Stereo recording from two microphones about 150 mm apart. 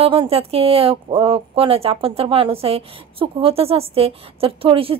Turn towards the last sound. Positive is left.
turn(degrees=-40)  # may be behind; listen again after turning